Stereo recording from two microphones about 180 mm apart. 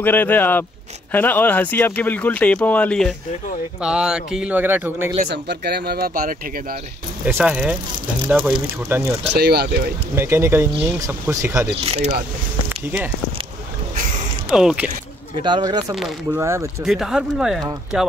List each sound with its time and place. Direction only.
0.0 s speech: 10° left (ahead or behind); by 5.1 s 10° right (ahead or behind)
5.3 s speech: 65° right (ahead or behind); by 6.8 s 50° right (ahead or behind)
7.2 s speech: 10° right (ahead or behind)
8.8 s speech: 10° right (ahead or behind)
9.3 s speech: 65° right (ahead or behind)
10.1 s speech: 15° right (ahead or behind)
11.8 s speech: 35° right (ahead or behind)
14.5 s speech: 5° right (ahead or behind)
15.4 s speech: 25° right (ahead or behind)
16.8 s speech: centre (ahead or behind)